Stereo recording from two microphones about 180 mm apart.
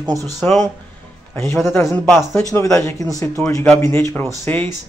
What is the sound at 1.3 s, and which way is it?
Speech, 15° left (ahead or behind).